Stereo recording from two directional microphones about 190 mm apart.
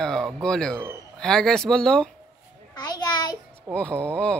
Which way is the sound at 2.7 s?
20° left (ahead or behind).